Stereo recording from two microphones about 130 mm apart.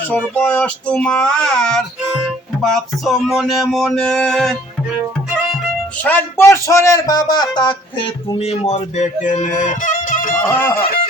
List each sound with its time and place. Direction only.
0.3 s speech: 10° left (ahead or behind)
2.2 s music: centre (ahead or behind)
6.0 s speech: 15° left (ahead or behind); by 8.1 s 40° left (ahead or behind)
8.4 s music: 55° left (ahead or behind); by 10.3 s 90° left
10.5 s speech: 15° left (ahead or behind)